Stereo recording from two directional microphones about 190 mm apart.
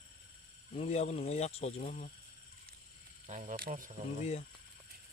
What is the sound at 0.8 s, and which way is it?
Speech, 35° left (ahead or behind).